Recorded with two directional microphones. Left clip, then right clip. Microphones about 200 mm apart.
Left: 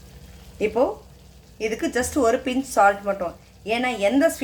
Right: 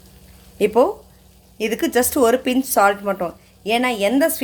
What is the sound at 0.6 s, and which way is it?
Speech, 50° right (ahead or behind).